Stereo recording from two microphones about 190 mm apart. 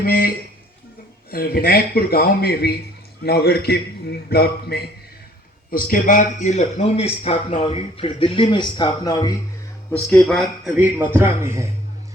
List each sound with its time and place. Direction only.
0.0 s a man's voice: 50° left (ahead or behind)
1.3 s a man's voice: 50° left (ahead or behind)
5.7 s a man's voice: 45° left (ahead or behind); by 9.4 s 20° left (ahead or behind)
10.1 s speech: centre (ahead or behind)
10.8 s a man's voice: 10° right (ahead or behind)